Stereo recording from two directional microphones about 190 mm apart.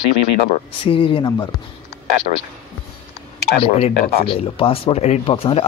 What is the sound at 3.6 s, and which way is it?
Speech, 30° left (ahead or behind).